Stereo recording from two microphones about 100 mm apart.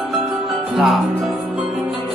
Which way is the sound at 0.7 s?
Centre (ahead or behind).